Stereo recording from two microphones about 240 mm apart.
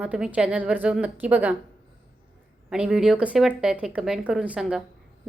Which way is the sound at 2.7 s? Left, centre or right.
Centre.